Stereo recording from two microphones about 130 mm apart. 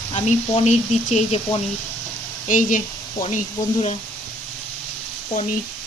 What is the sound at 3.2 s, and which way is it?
Speech, 55° left (ahead or behind).